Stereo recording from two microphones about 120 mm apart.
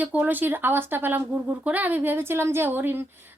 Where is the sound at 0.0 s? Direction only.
15° right (ahead or behind).